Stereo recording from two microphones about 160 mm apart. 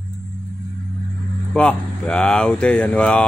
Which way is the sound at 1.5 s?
5° left (ahead or behind).